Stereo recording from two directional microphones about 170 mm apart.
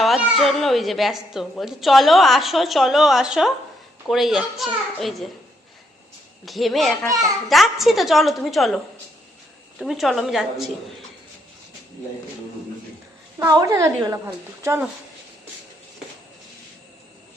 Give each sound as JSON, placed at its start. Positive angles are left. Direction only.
{"t": 0.0, "sound": "speech", "side_deg": 0}
{"t": 6.4, "sound": "speech", "side_deg": 0}
{"t": 13.5, "sound": "a woman's voice", "side_deg": -20}